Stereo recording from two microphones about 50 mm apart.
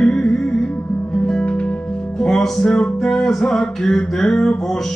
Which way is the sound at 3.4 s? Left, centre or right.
Centre.